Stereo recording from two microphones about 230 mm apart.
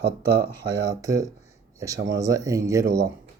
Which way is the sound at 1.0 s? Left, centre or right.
Centre.